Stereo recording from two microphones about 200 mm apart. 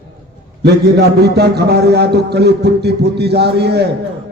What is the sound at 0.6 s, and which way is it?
A man's voice, 55° right (ahead or behind).